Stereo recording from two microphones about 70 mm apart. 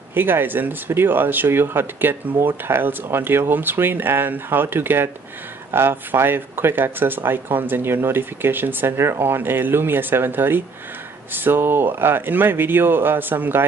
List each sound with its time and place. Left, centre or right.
0.1 s speech: right